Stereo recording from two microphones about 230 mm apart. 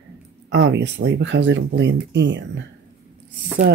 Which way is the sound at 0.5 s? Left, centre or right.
Right.